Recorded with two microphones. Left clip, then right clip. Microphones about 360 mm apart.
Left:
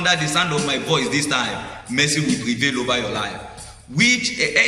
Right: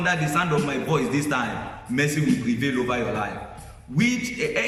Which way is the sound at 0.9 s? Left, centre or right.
Centre.